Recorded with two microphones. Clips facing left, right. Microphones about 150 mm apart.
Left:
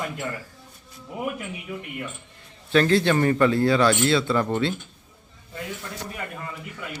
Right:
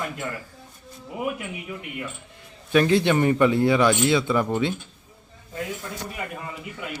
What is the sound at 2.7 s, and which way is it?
Speech, 15° right (ahead or behind).